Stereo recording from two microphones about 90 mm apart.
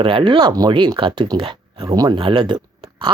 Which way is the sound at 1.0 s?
80° right.